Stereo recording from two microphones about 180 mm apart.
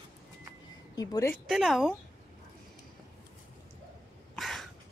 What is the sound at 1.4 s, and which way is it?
Speech, centre (ahead or behind).